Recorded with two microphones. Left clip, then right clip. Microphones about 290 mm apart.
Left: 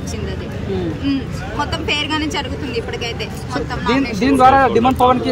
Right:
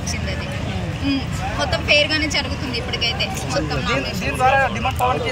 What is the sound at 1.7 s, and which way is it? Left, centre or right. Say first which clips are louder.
Speech: right 5 dB; centre.